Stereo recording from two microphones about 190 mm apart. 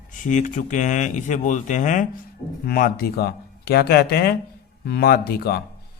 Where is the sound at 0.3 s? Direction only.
40° left (ahead or behind).